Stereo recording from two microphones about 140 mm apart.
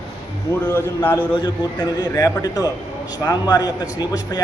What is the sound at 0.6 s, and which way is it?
Speech, 15° left (ahead or behind).